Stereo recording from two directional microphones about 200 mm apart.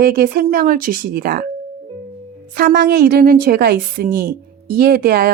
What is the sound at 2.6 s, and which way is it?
Speech, 45° right (ahead or behind).